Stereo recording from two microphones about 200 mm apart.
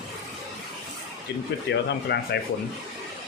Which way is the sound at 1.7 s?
60° left (ahead or behind).